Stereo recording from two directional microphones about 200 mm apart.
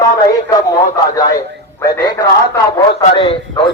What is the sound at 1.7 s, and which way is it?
A man's voice, 15° left (ahead or behind).